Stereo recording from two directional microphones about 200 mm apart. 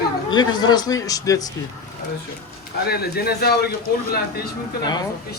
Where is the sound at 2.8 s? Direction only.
50° left (ahead or behind).